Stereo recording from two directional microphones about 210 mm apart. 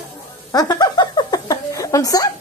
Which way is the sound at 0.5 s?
15° left (ahead or behind).